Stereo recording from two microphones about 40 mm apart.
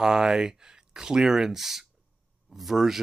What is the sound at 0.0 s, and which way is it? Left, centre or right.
Speech, centre.